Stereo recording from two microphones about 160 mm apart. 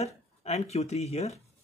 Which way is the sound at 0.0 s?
40° left (ahead or behind).